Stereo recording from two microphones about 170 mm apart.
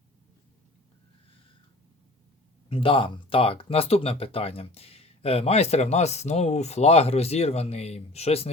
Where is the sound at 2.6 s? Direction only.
30° left (ahead or behind).